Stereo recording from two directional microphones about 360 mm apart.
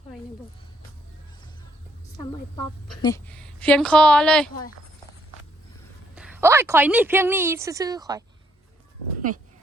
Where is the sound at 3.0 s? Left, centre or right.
Centre.